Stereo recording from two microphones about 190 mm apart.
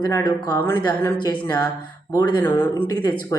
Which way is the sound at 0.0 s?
15° left (ahead or behind).